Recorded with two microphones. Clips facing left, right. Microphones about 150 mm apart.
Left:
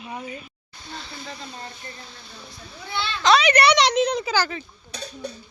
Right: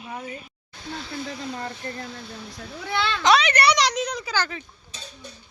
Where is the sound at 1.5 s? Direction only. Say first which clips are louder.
Right 6 dB; 60° right (ahead or behind).